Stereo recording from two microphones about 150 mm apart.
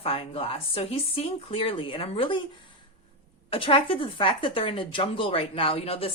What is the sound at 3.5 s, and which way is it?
A woman's voice, 35° left (ahead or behind).